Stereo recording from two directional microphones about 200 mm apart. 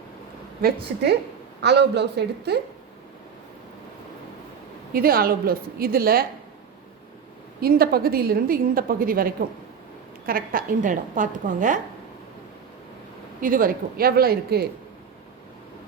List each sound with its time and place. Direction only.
0.9 s a woman's voice: 50° right (ahead or behind)
4.9 s a woman's voice: 50° right (ahead or behind)
7.6 s a woman's voice: 50° right (ahead or behind)
13.4 s a woman's voice: 45° right (ahead or behind)